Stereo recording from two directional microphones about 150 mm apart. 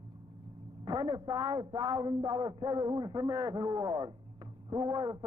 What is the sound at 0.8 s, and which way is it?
A man's voice, 30° right (ahead or behind).